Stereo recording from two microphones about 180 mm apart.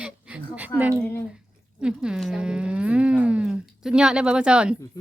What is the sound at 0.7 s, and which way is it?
Speech, 15° left (ahead or behind).